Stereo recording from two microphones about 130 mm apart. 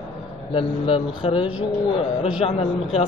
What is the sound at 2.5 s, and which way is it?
Speech, 45° left (ahead or behind).